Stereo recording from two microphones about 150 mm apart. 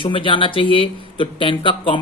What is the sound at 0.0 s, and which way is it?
Speech, 35° left (ahead or behind).